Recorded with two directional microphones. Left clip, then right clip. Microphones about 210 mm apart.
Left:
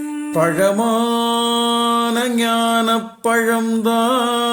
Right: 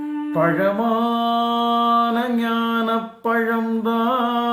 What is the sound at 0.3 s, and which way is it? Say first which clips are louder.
Music: left 3 dB; 40° left (ahead or behind).